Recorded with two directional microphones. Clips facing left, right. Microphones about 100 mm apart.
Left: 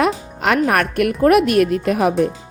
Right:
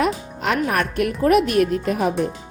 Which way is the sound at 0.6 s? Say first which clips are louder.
Left 4 dB; 65° left (ahead or behind).